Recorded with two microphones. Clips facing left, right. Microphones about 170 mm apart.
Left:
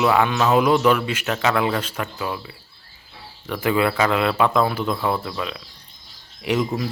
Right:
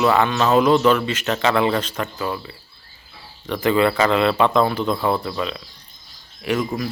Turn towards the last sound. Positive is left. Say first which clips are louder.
# even
turn(degrees=20)  # may be behind; listen again after turning